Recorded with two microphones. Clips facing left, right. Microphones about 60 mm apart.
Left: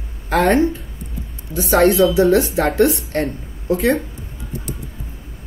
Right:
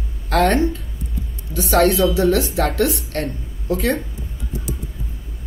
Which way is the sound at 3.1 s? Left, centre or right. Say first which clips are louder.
Left 4 dB; left.